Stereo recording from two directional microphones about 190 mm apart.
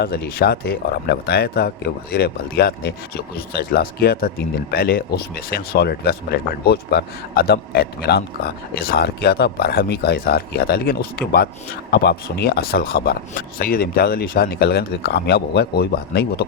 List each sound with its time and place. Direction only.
0.0 s speech: 55° left (ahead or behind)